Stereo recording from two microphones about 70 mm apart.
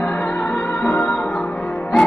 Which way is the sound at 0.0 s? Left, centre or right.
Left.